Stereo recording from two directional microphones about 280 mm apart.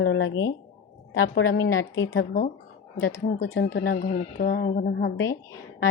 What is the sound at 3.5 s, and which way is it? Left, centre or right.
Speech, left.